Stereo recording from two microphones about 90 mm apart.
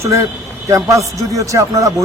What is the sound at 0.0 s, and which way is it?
Speech, 30° right (ahead or behind).